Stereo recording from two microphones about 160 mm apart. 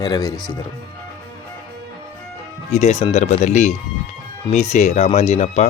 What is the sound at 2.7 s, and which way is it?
Speech, 40° left (ahead or behind).